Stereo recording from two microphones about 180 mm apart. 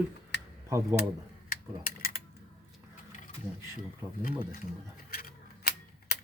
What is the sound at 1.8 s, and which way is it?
Mechanisms, 50° left (ahead or behind).